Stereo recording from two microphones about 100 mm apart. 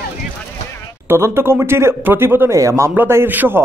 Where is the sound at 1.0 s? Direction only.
25° right (ahead or behind).